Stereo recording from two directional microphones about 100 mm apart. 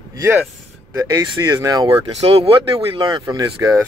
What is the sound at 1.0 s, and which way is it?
Speech, 40° right (ahead or behind).